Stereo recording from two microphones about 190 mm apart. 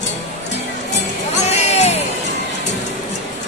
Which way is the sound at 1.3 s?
35° left (ahead or behind).